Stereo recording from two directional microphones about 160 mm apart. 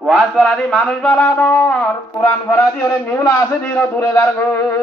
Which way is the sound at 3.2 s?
15° left (ahead or behind).